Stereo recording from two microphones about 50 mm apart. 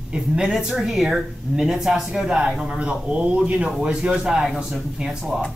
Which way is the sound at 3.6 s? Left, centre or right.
Centre.